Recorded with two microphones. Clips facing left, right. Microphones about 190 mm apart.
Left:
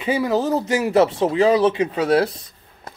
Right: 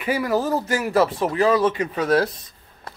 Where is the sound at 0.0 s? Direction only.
20° left (ahead or behind).